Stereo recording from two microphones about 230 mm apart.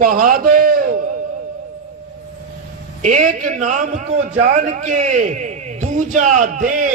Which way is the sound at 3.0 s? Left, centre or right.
Right.